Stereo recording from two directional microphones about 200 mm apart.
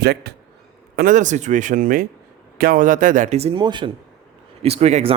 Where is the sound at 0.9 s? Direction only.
40° right (ahead or behind).